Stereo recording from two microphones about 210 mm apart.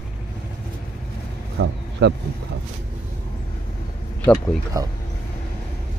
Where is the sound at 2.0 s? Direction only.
55° right (ahead or behind).